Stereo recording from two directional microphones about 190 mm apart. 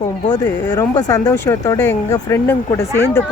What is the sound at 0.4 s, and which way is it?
Speech, 10° left (ahead or behind).